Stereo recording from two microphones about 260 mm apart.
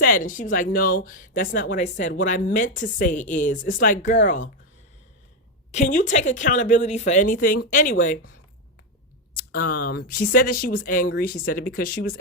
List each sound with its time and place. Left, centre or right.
0.0 s a woman's voice: left
5.7 s a woman's voice: left
9.6 s a woman's voice: left